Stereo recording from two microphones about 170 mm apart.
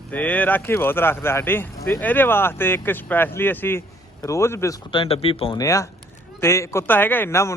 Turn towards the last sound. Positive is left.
turn(degrees=15)  # may be behind; listen again after turning